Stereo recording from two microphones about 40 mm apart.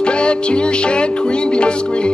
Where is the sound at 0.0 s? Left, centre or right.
Left.